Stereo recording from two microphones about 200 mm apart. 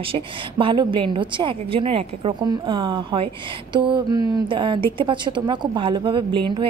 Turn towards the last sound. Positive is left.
turn(degrees=-25)  # may be behind; listen again after turning